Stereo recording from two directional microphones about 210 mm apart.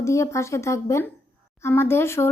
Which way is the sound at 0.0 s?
15° left (ahead or behind).